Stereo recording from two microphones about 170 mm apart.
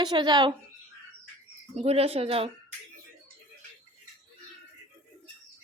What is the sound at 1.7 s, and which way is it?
Speech, 35° right (ahead or behind).